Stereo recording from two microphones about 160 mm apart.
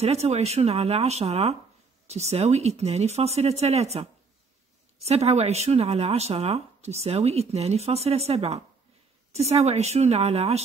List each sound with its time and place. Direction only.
0.0 s speech: 40° right (ahead or behind)